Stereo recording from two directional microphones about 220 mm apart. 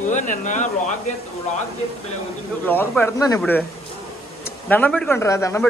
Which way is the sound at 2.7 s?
10° left (ahead or behind).